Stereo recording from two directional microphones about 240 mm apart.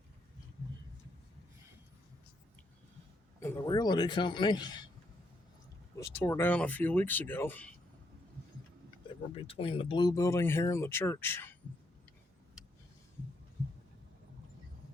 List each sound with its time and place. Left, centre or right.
3.4 s speech: centre
6.0 s speech: centre
9.3 s speech: left